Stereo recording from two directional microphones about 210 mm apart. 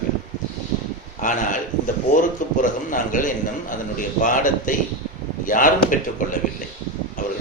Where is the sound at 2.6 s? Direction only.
40° left (ahead or behind).